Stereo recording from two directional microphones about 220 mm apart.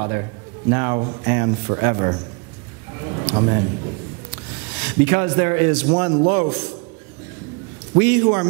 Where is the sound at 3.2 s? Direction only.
25° right (ahead or behind).